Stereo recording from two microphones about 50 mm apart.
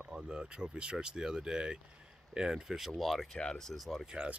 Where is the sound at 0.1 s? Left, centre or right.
Centre.